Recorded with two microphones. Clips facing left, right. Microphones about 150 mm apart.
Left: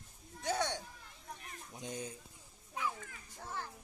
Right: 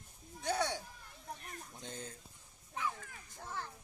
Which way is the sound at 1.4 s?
45° right (ahead or behind).